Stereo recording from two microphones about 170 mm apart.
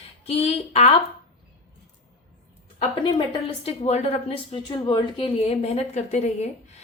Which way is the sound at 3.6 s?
40° left (ahead or behind).